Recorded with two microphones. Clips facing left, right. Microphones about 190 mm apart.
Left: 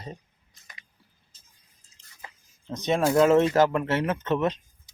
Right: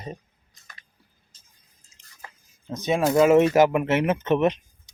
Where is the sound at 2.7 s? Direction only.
5° right (ahead or behind).